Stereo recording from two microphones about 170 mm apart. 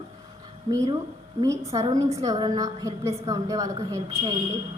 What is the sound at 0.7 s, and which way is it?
A woman's voice, 20° right (ahead or behind).